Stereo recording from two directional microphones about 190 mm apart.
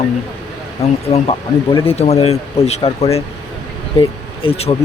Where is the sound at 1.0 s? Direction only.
30° left (ahead or behind).